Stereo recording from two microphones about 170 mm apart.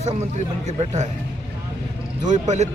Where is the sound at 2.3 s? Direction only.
40° right (ahead or behind).